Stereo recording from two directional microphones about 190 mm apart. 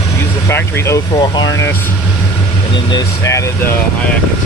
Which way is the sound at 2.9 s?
15° left (ahead or behind).